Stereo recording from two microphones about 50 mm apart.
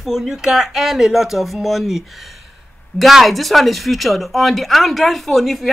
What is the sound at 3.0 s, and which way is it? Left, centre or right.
Speech, centre.